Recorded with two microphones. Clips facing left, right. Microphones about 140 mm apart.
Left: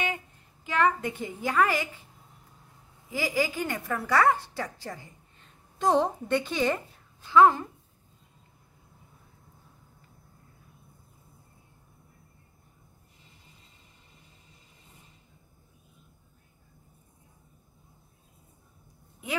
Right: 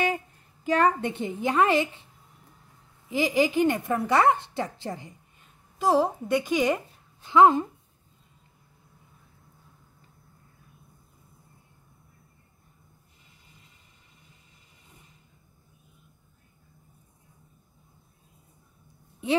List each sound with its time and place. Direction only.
0.7 s a woman's voice: 40° right (ahead or behind)
1.1 s a woman's voice: 25° right (ahead or behind)
3.1 s a woman's voice: 20° right (ahead or behind)
5.4 s a woman's voice: 5° right (ahead or behind)